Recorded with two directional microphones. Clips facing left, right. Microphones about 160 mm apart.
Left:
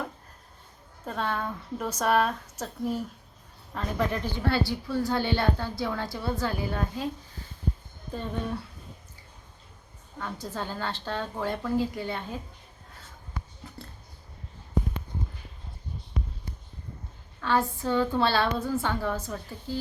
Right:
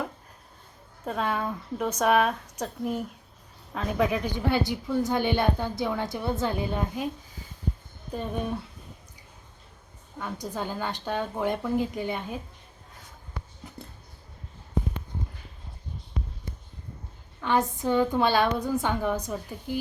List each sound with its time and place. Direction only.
1.0 s speech: 5° right (ahead or behind)
4.4 s a woman's voice: 15° right (ahead or behind)
10.2 s a woman's voice: 15° right (ahead or behind)
17.4 s a woman's voice: 20° right (ahead or behind)